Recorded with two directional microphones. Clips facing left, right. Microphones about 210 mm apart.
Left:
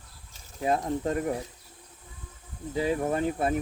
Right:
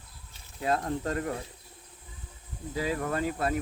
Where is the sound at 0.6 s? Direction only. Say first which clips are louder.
Left 2 dB; 20° left (ahead or behind).